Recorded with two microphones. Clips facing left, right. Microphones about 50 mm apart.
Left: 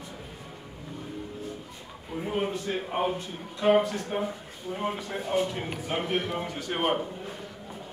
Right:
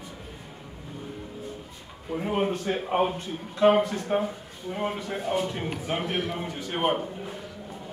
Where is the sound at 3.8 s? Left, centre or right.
Right.